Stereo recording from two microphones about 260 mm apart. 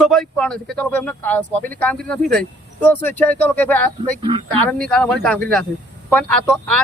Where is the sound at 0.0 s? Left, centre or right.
Centre.